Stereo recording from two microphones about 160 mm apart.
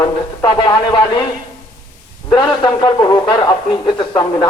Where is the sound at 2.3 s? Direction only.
30° left (ahead or behind).